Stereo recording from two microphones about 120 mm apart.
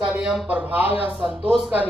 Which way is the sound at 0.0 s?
10° right (ahead or behind).